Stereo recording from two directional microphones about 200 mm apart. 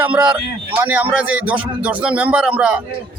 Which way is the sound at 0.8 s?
10° right (ahead or behind).